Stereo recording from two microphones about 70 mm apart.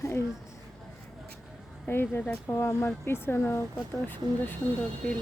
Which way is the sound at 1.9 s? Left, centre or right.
Left.